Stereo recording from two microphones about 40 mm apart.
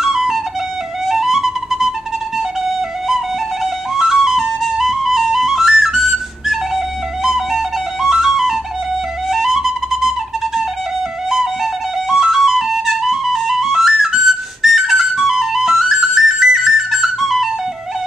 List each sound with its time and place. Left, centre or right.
0.0 s flute: centre